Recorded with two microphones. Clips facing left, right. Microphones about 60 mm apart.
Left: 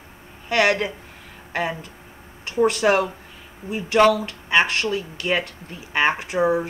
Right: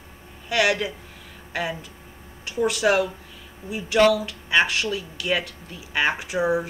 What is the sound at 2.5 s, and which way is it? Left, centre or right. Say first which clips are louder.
Speech: left 3 dB; left.